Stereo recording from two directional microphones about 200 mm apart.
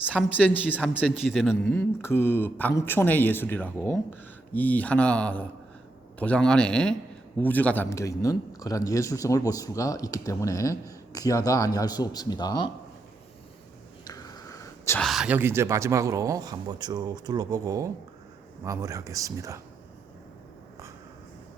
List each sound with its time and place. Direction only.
0.1 s a man's voice: 5° left (ahead or behind)
14.0 s whispering: 20° left (ahead or behind)
15.0 s speech: centre (ahead or behind)